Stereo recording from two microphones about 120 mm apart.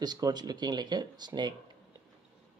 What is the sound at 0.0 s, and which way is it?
Speech, 35° right (ahead or behind).